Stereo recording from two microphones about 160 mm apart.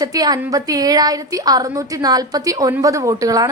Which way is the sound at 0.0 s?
25° right (ahead or behind).